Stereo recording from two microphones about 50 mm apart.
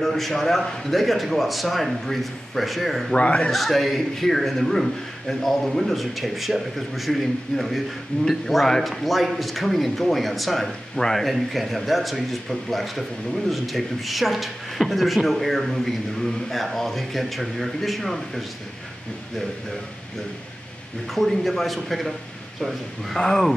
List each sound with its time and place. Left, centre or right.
0.0 s speech: centre
3.2 s speech: left
3.5 s speech: centre
21.1 s speech: centre
23.1 s speech: centre